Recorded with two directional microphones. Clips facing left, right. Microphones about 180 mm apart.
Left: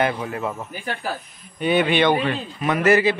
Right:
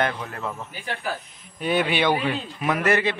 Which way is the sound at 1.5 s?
Centre (ahead or behind).